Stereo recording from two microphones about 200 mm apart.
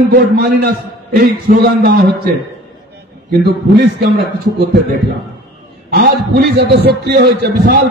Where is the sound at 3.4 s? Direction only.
50° right (ahead or behind).